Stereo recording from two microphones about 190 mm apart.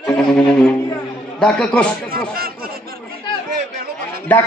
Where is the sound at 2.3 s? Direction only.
50° right (ahead or behind).